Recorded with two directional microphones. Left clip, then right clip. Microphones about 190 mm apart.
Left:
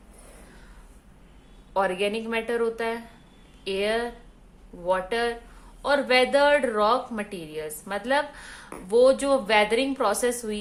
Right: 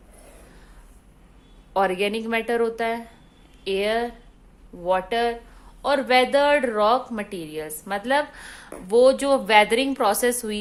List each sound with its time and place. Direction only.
1.7 s speech: 35° right (ahead or behind)